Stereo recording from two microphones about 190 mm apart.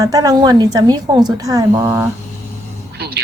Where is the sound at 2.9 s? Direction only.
60° right (ahead or behind).